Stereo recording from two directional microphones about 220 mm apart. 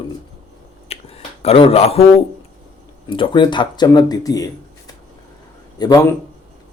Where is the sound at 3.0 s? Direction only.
20° left (ahead or behind).